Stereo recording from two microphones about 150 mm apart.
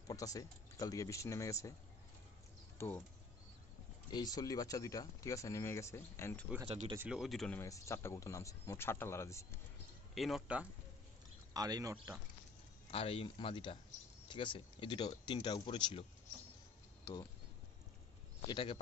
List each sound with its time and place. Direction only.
0.1 s speech: 25° left (ahead or behind)
2.8 s speech: 15° left (ahead or behind)
4.1 s speech: 25° left (ahead or behind)
7.0 s speech: 5° right (ahead or behind)
7.5 s speech: 20° left (ahead or behind)
10.1 s speech: centre (ahead or behind)
11.5 s speech: 25° right (ahead or behind)
12.9 s speech: 40° left (ahead or behind)
17.0 s speech: 25° left (ahead or behind)
18.5 s speech: 35° left (ahead or behind)